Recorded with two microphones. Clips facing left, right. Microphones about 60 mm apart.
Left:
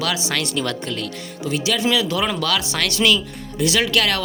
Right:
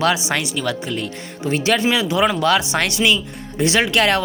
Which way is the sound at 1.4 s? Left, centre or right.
Right.